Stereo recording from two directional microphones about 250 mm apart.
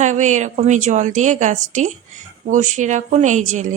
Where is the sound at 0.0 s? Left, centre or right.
Right.